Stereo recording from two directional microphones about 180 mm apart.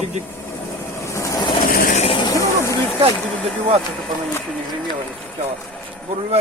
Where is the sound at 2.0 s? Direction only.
25° left (ahead or behind).